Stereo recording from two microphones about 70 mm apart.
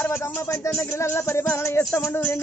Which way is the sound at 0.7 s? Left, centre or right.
Left.